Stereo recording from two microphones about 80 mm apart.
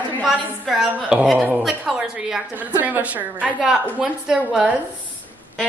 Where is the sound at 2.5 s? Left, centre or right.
Right.